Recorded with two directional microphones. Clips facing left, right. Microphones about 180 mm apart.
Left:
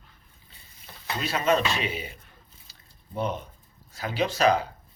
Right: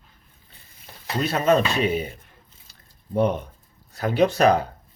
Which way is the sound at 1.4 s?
40° right (ahead or behind).